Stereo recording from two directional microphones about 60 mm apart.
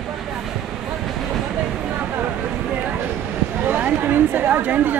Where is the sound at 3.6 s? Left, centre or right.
Right.